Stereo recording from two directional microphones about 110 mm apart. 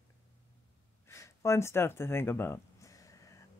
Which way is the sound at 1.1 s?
25° left (ahead or behind).